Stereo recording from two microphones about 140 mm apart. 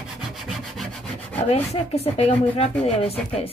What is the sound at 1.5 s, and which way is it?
A woman's voice, 45° left (ahead or behind).